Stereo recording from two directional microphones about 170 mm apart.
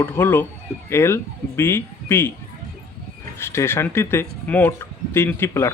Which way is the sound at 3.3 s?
15° left (ahead or behind).